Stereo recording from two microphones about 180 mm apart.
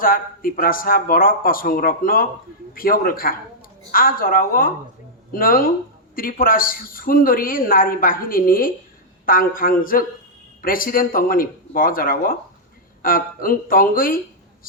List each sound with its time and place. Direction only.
0.0 s a woman's voice: 50° left (ahead or behind)